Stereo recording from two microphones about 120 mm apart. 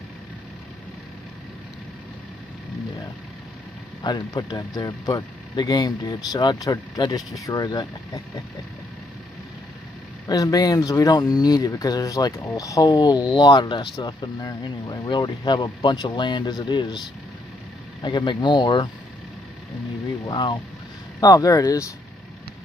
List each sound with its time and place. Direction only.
4.0 s speech: 35° left (ahead or behind)
10.2 s speech: 30° left (ahead or behind)
18.0 s speech: 40° left (ahead or behind)
20.2 s speech: 40° left (ahead or behind)